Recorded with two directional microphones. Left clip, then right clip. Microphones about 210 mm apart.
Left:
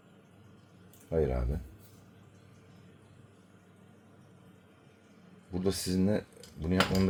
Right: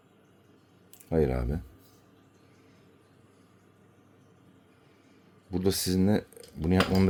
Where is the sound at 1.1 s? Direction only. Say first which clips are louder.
Right 3 dB; 30° right (ahead or behind).